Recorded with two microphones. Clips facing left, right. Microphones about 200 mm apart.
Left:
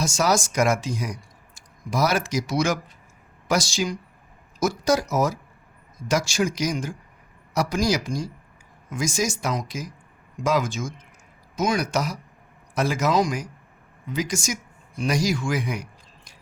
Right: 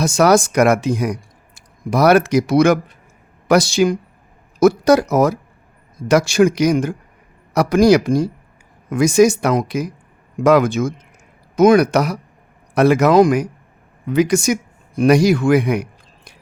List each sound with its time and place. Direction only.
0.0 s speech: 60° right (ahead or behind)